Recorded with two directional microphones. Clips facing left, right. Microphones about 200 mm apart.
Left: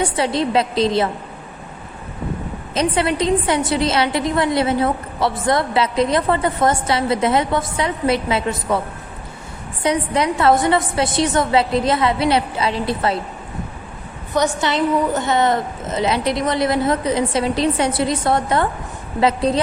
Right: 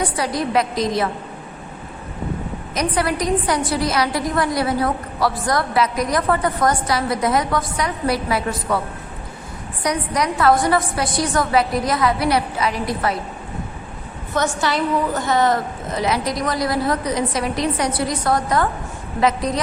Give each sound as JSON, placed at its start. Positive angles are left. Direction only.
{"t": 0.0, "sound": "a woman's voice", "side_deg": 25}
{"t": 2.7, "sound": "a woman's voice", "side_deg": 25}
{"t": 9.8, "sound": "a woman's voice", "side_deg": 25}
{"t": 14.3, "sound": "a woman's voice", "side_deg": 20}